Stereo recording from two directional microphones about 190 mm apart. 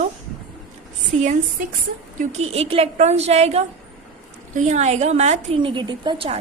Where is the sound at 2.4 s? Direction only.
30° right (ahead or behind).